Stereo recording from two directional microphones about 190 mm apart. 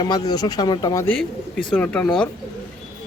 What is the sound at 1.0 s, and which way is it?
A man's voice, 5° left (ahead or behind).